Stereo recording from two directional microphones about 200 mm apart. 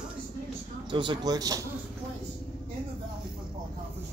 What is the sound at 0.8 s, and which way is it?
Speech, 25° right (ahead or behind).